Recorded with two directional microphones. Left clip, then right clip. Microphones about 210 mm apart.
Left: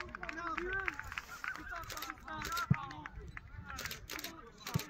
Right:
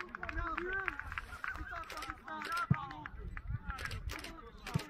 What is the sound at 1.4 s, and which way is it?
Honk, centre (ahead or behind).